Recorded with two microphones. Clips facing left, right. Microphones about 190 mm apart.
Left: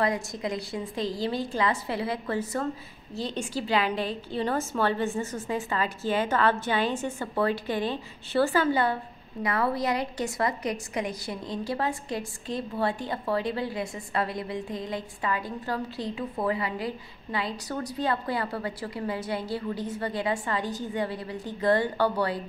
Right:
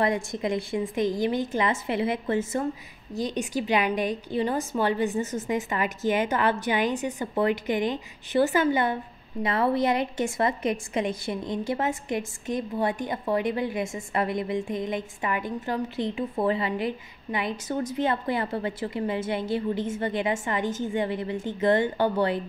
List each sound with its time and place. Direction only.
0.0 s a woman's voice: 25° right (ahead or behind)